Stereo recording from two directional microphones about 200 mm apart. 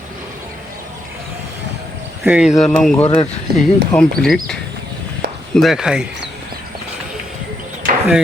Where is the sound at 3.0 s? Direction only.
25° left (ahead or behind).